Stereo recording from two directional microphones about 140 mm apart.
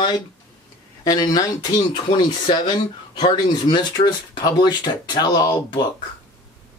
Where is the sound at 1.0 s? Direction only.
30° left (ahead or behind).